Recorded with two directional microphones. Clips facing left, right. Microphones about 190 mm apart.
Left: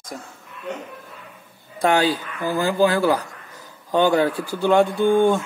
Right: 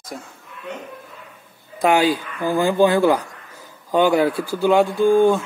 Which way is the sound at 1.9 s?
10° right (ahead or behind).